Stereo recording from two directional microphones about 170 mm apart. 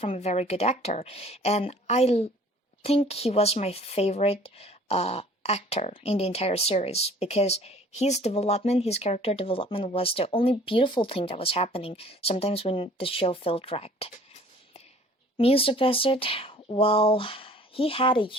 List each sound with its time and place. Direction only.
0.0 s speech: 40° left (ahead or behind)
15.4 s speech: 35° left (ahead or behind)